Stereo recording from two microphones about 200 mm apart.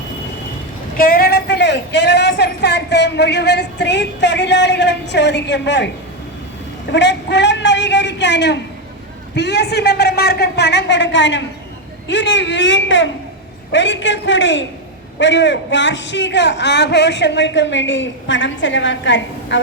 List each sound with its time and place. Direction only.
0.9 s speech: 45° left (ahead or behind)
6.9 s a woman's voice: 60° left (ahead or behind)